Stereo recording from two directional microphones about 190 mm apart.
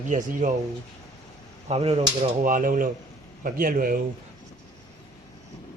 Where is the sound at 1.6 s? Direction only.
30° right (ahead or behind).